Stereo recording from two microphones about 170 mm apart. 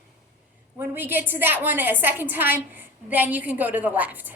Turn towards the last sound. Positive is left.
turn(degrees=-10)  # may be behind; listen again after turning